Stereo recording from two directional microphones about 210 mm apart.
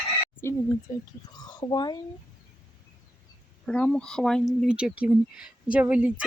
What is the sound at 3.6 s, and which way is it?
Speech, 5° left (ahead or behind).